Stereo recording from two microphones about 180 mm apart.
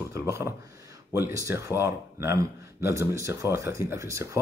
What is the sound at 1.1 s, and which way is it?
Speech, 15° right (ahead or behind).